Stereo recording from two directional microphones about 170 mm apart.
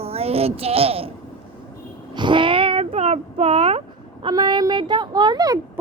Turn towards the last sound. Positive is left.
turn(degrees=-25)  # may be behind; listen again after turning